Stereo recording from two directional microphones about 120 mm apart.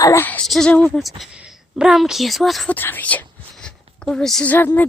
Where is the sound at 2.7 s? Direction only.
15° left (ahead or behind).